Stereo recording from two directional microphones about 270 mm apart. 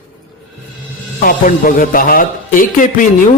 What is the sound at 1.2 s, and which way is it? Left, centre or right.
Speech, left.